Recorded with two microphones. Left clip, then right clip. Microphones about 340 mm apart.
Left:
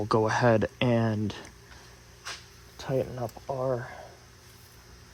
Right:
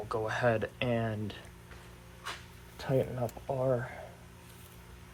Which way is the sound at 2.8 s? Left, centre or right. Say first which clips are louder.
Left 1 dB; left.